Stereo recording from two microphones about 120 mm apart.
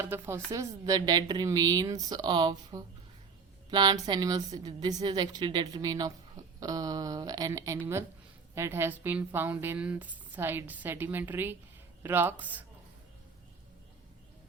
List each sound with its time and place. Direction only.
0.1 s a woman's voice: 20° right (ahead or behind)